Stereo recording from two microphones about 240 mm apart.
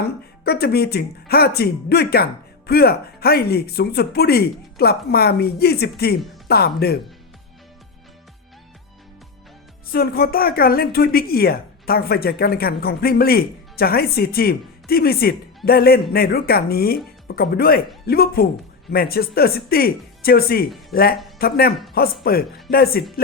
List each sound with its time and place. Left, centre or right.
0.4 s a woman's voice: left
9.8 s a woman's voice: left